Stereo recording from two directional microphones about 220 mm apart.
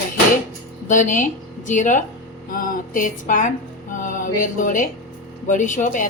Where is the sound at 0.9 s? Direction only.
35° left (ahead or behind).